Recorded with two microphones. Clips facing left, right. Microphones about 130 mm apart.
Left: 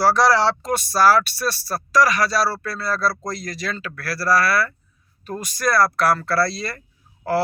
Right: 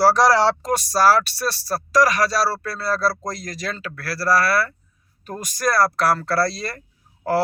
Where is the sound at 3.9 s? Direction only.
30° right (ahead or behind).